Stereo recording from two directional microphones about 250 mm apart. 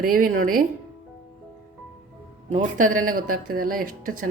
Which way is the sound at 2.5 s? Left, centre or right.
Right.